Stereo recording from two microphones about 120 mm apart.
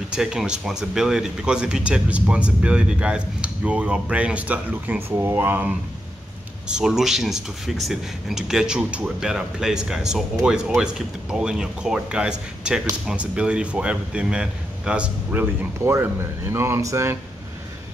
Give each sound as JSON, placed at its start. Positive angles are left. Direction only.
{"t": 0.1, "sound": "speech", "side_deg": -5}
{"t": 6.7, "sound": "speech", "side_deg": -5}
{"t": 15.8, "sound": "speech", "side_deg": -20}